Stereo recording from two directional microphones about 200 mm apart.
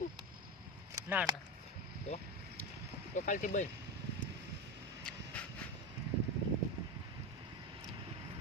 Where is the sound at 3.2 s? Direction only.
40° left (ahead or behind).